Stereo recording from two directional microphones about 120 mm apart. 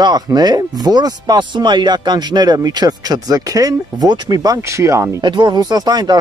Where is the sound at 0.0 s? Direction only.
35° right (ahead or behind).